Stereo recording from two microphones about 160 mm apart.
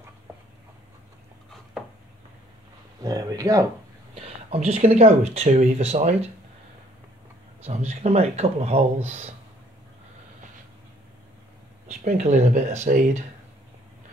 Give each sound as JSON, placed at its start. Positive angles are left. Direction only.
{"t": 3.0, "sound": "speech", "side_deg": -25}
{"t": 4.1, "sound": "speech", "side_deg": -40}
{"t": 7.6, "sound": "speech", "side_deg": -40}
{"t": 12.2, "sound": "speech", "side_deg": -50}